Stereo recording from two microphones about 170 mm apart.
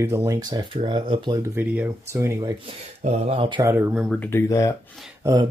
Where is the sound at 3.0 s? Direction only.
40° right (ahead or behind).